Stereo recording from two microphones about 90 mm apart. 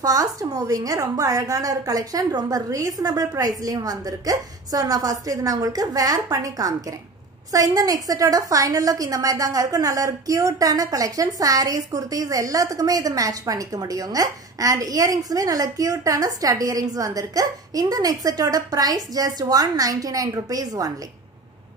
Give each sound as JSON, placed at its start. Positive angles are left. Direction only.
{"t": 0.0, "sound": "a woman's voice", "side_deg": -40}